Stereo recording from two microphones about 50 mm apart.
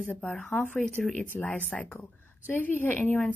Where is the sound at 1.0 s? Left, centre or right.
Centre.